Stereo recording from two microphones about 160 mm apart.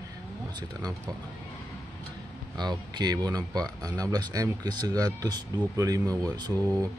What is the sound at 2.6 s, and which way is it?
Speech, 25° right (ahead or behind).